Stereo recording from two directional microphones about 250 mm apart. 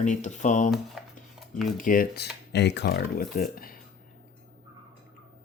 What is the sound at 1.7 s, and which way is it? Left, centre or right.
Speech, left.